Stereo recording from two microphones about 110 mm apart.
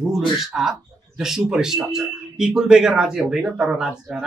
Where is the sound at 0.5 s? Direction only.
5° right (ahead or behind).